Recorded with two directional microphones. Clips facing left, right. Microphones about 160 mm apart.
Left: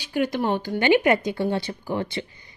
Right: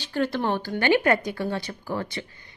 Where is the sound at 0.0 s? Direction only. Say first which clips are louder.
Left 2 dB; 15° left (ahead or behind).